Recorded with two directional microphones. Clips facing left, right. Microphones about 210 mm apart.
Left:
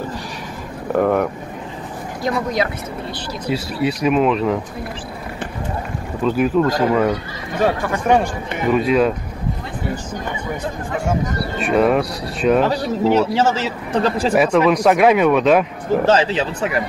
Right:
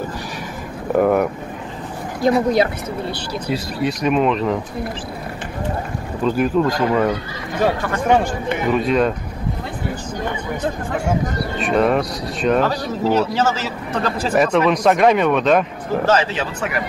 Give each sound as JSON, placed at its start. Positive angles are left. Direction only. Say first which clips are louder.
{"t": 0.9, "sound": "speech", "louder": "right 1 dB", "side_deg": -5}
{"t": 2.2, "sound": "speech", "louder": "right 5 dB", "side_deg": -35}
{"t": 3.4, "sound": "speech", "louder": "left 2 dB", "side_deg": 5}
{"t": 6.2, "sound": "speech", "louder": "left 1 dB", "side_deg": 0}
{"t": 8.6, "sound": "speech", "louder": "left 2 dB", "side_deg": 5}
{"t": 11.6, "sound": "speech", "louder": "left 1 dB", "side_deg": 5}
{"t": 12.6, "sound": "a man's voice", "louder": "left 2 dB", "side_deg": 25}
{"t": 14.3, "sound": "speech", "louder": "even", "side_deg": 5}
{"t": 16.1, "sound": "a man's voice", "louder": "left 1 dB", "side_deg": 30}